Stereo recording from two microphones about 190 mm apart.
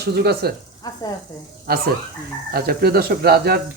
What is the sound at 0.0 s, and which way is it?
Speech, 55° right (ahead or behind).